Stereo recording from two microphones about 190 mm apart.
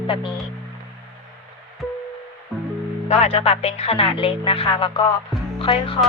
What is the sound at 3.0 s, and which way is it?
Speech, 35° left (ahead or behind).